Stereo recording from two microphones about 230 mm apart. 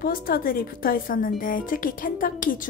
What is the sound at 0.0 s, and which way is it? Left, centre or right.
Speech, left.